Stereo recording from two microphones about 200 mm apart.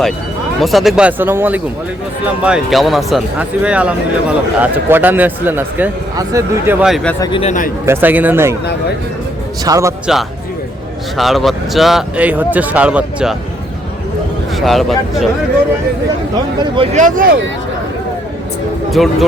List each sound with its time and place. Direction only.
0.6 s speech: centre (ahead or behind)
6.8 s speech: centre (ahead or behind)
7.2 s a man's voice: 25° left (ahead or behind)
7.9 s speech: 10° right (ahead or behind)
9.6 s speech: 15° right (ahead or behind)
11.2 s speech: centre (ahead or behind)
14.5 s speech: centre (ahead or behind)
16.7 s speech: 30° right (ahead or behind)
19.0 s speech: centre (ahead or behind)